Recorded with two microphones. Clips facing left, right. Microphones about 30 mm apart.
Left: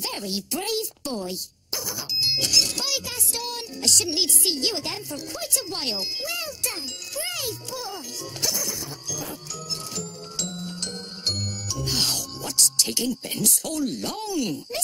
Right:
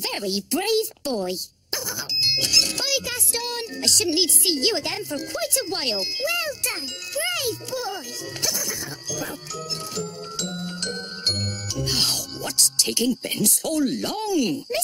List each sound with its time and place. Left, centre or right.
0.0 s speech: right
9.9 s music: centre
10.6 s music: right
11.8 s speech: centre